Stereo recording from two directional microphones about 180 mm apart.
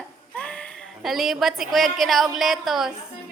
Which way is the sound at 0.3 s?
5° left (ahead or behind).